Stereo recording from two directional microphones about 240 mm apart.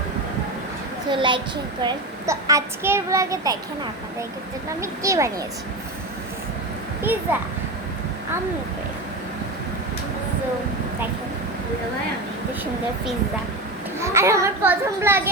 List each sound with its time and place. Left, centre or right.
1.1 s a child's voice: centre
4.8 s a child's voice: centre
14.0 s a child's voice: centre